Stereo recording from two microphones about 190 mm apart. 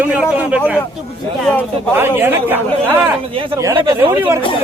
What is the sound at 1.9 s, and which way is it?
Speech, 10° right (ahead or behind).